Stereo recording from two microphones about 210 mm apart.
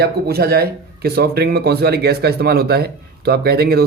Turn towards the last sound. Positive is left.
turn(degrees=-50)  # may be behind; listen again after turning